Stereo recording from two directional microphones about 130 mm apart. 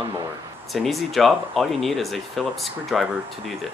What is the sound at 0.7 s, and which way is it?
Speech, centre (ahead or behind).